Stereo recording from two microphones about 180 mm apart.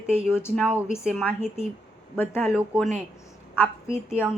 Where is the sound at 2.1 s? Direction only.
10° left (ahead or behind).